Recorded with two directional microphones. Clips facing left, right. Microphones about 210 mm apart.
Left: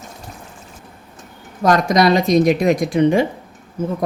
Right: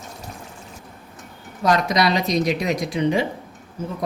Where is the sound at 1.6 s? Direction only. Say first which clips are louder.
Left 5 dB; 45° left (ahead or behind).